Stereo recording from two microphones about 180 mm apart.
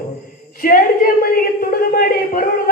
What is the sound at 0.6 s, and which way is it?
Speech, 50° left (ahead or behind).